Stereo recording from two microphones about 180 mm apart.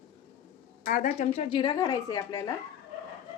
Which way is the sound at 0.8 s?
50° left (ahead or behind).